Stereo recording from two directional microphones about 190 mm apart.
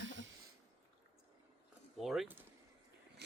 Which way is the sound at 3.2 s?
60° right (ahead or behind).